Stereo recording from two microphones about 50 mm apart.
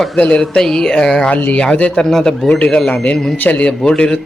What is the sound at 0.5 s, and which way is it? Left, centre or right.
Speech, centre.